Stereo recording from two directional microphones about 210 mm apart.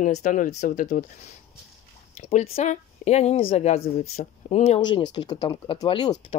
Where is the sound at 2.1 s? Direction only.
30° left (ahead or behind).